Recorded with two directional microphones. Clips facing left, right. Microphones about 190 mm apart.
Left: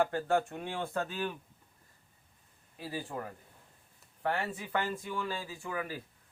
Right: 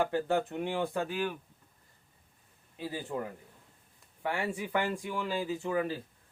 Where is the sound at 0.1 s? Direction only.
20° right (ahead or behind).